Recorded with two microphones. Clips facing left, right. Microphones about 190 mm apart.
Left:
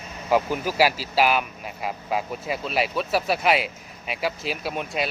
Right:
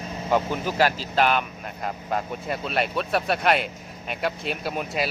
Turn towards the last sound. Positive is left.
turn(degrees=0)  # may be behind; listen again after turning